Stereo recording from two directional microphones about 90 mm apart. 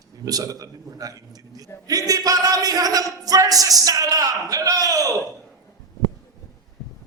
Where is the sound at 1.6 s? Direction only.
40° right (ahead or behind).